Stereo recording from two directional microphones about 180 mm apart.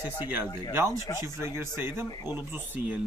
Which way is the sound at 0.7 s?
15° right (ahead or behind).